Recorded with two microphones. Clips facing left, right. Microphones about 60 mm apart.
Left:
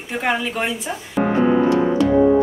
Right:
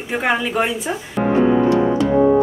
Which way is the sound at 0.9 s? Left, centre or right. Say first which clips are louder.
Right 4 dB; right.